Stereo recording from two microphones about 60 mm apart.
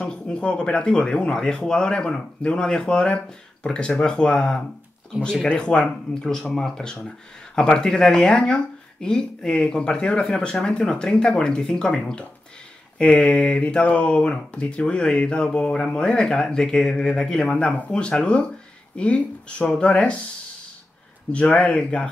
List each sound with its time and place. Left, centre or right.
0.0 s speech: centre
21.3 s speech: left